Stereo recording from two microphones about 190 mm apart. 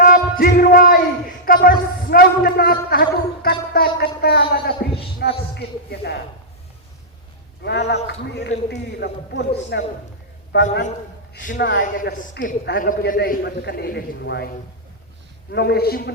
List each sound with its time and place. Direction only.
0.0 s music: 50° left (ahead or behind)
1.5 s a man's voice: 50° left (ahead or behind)
7.6 s a man's voice: 60° left (ahead or behind)
11.3 s a man's voice: 50° left (ahead or behind)
15.5 s a man's voice: 55° left (ahead or behind)